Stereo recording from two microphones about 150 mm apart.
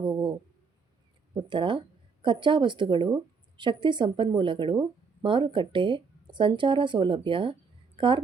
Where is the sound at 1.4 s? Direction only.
30° right (ahead or behind).